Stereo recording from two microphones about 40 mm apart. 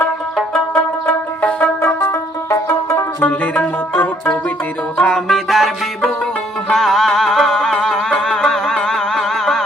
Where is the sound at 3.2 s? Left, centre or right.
Left.